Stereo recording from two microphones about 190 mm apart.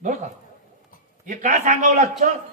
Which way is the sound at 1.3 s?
40° right (ahead or behind).